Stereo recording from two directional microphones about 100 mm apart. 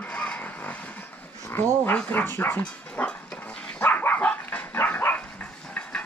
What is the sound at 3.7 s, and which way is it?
Dog, 15° left (ahead or behind).